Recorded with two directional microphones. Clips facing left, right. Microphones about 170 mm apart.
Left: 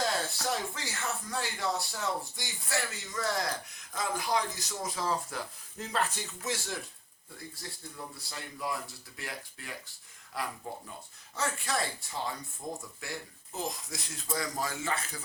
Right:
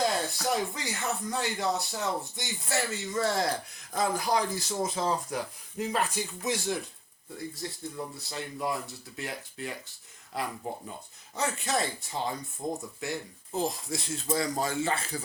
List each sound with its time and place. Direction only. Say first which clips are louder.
0.0 s speech: right 3 dB; 15° right (ahead or behind)
3.9 s speech: right 4 dB; 35° right (ahead or behind)